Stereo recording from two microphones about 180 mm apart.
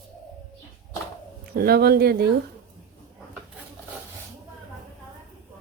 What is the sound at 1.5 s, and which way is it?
Speech, 60° right (ahead or behind).